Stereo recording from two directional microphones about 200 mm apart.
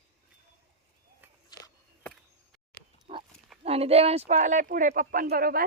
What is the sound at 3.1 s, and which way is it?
Livestock, 25° right (ahead or behind).